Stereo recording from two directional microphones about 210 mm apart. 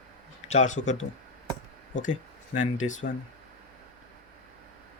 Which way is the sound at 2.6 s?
35° left (ahead or behind).